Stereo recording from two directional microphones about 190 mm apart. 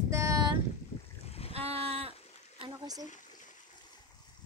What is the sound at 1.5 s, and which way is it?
Speech, 30° right (ahead or behind).